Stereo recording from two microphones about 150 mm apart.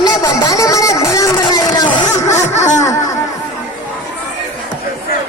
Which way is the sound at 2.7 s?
20° left (ahead or behind).